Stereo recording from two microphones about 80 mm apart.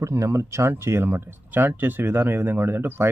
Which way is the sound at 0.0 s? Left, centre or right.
Right.